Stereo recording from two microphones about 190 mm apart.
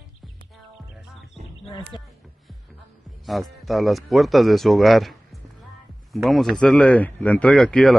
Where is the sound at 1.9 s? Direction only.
25° left (ahead or behind).